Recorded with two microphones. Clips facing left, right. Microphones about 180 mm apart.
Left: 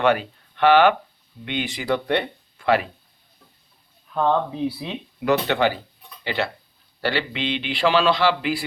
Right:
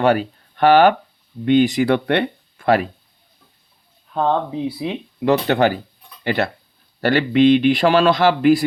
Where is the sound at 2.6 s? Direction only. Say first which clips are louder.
Right 3 dB; 45° right (ahead or behind).